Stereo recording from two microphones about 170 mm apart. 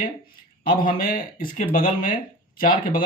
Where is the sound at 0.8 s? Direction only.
55° left (ahead or behind).